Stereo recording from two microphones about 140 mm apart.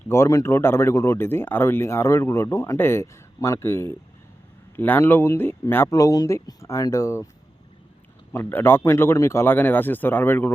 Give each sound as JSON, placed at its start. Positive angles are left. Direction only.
{"t": 0.1, "sound": "speech", "side_deg": 20}
{"t": 8.3, "sound": "speech", "side_deg": 15}